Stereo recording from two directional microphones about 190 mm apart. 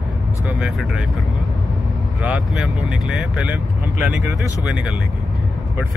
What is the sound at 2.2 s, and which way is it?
Speech, 5° right (ahead or behind).